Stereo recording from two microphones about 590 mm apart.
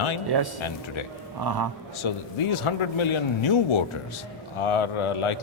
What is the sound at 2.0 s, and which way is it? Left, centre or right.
A man's voice, left.